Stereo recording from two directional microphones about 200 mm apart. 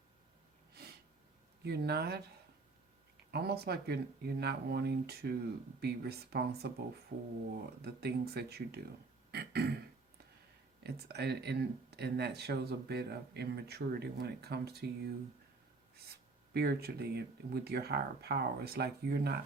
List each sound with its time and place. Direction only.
1.6 s speech: 55° right (ahead or behind)
3.3 s speech: 55° right (ahead or behind)
7.8 s speech: 50° right (ahead or behind)
9.3 s throat clearing: 55° right (ahead or behind)
10.8 s speech: 55° right (ahead or behind)
16.6 s speech: 50° right (ahead or behind)